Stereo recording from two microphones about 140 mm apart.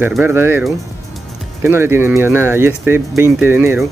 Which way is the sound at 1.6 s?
15° right (ahead or behind).